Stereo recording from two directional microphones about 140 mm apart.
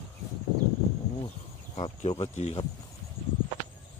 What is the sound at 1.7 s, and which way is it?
Speech, 45° left (ahead or behind).